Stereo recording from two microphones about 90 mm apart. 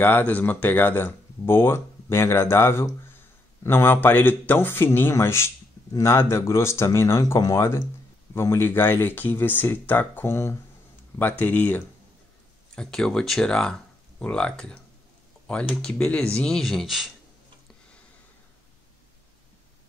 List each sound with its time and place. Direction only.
0.0 s speech: 20° left (ahead or behind)
7.3 s speech: 40° left (ahead or behind)
8.4 s speech: 25° left (ahead or behind)
12.7 s speech: 10° left (ahead or behind)